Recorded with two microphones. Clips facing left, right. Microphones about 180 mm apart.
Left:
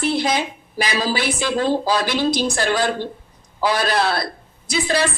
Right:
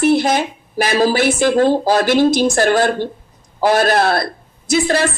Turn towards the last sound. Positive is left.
turn(degrees=-50)  # may be behind; listen again after turning